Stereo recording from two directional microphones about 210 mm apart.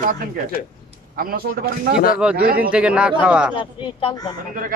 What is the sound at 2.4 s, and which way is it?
Speech, 45° right (ahead or behind).